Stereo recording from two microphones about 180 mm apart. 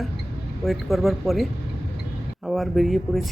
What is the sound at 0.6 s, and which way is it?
Speech, centre (ahead or behind).